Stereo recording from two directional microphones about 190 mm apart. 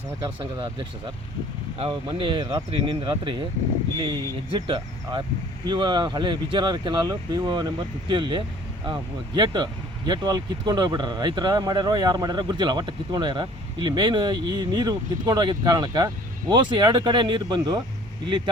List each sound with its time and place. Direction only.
0.2 s speech: 20° right (ahead or behind)